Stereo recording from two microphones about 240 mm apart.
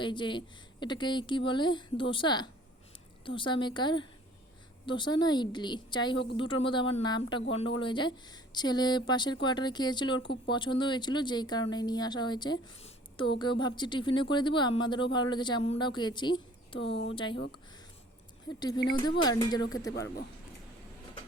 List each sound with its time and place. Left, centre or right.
0.0 s speech: centre
18.4 s speech: centre